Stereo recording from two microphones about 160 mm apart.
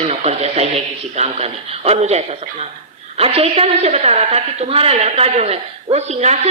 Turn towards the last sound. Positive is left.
turn(degrees=-45)  # may be behind; listen again after turning